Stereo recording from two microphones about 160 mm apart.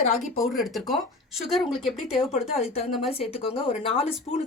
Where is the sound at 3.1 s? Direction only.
40° left (ahead or behind).